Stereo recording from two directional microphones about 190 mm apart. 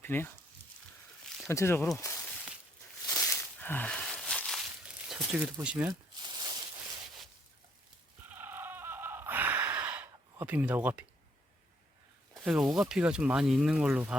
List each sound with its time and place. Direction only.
0.0 s speech: 10° left (ahead or behind)
1.5 s speech: 15° left (ahead or behind)
3.1 s a sound: 10° left (ahead or behind)
5.0 s speech: 5° right (ahead or behind)
5.9 s a sound: 25° right (ahead or behind)
8.3 s sheep: 10° right (ahead or behind)
12.3 s speech: centre (ahead or behind)